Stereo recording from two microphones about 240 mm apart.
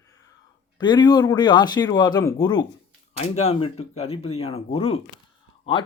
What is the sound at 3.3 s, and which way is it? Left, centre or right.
Speech, left.